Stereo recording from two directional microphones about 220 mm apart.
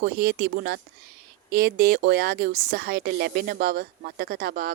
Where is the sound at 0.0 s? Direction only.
50° right (ahead or behind).